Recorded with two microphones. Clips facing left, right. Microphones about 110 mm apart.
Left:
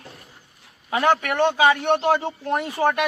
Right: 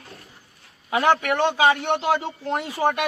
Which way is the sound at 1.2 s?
20° right (ahead or behind).